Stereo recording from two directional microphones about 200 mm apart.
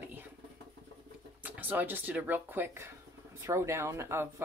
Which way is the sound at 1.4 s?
10° right (ahead or behind).